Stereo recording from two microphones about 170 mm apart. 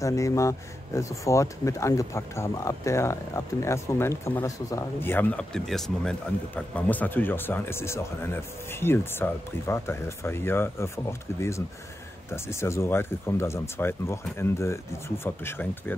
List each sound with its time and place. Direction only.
0.0 s speech: 20° left (ahead or behind)